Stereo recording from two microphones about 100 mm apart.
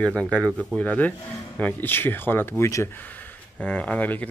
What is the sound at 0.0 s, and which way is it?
Speech, 10° left (ahead or behind).